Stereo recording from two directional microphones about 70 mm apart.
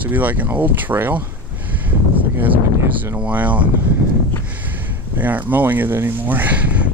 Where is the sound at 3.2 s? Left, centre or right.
Right.